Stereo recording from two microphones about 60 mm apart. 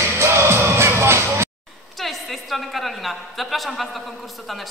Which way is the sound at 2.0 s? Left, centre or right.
Centre.